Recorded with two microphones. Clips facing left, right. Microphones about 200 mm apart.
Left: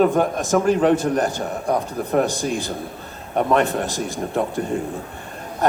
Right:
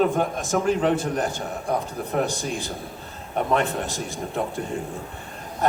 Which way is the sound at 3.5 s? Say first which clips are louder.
Left 4 dB; 45° left (ahead or behind).